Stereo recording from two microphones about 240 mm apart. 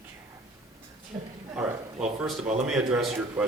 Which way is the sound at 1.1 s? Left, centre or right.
Centre.